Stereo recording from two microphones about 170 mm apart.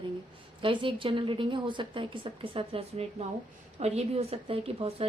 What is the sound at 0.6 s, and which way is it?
A woman's voice, 30° right (ahead or behind).